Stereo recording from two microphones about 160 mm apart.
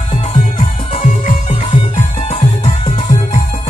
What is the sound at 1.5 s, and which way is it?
Music, 40° left (ahead or behind).